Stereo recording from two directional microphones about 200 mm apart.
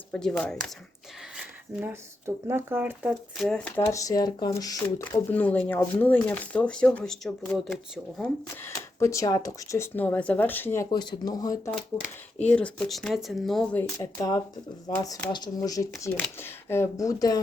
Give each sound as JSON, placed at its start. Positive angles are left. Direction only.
{"t": 0.1, "sound": "speech", "side_deg": 0}
{"t": 1.4, "sound": "speech", "side_deg": -10}
{"t": 3.3, "sound": "speech", "side_deg": 5}
{"t": 8.2, "sound": "speech", "side_deg": 15}
{"t": 12.4, "sound": "speech", "side_deg": 5}
{"t": 14.2, "sound": "speech", "side_deg": 20}